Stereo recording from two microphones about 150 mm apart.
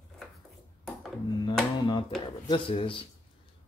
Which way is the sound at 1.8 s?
30° left (ahead or behind).